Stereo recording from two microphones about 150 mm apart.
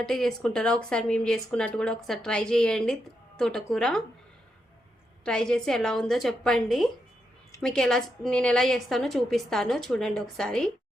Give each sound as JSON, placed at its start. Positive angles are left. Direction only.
{"t": 0.0, "sound": "speech", "side_deg": 5}
{"t": 5.2, "sound": "speech", "side_deg": 5}